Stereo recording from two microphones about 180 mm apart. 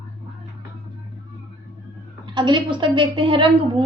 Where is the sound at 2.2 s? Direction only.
25° right (ahead or behind).